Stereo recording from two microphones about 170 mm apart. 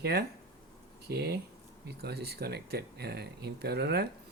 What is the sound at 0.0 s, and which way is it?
Speech, 70° right (ahead or behind).